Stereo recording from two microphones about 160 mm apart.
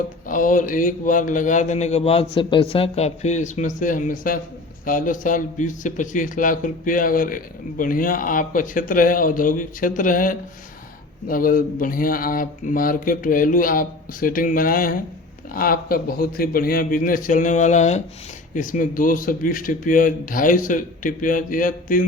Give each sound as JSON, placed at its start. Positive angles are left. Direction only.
{"t": 0.3, "sound": "speech", "side_deg": 55}